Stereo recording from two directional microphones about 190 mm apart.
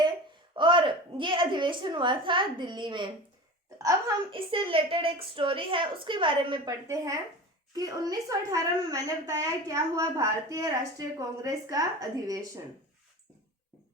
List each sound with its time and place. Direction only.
0.5 s a woman's voice: 25° right (ahead or behind)
4.3 s a woman's voice: 25° right (ahead or behind)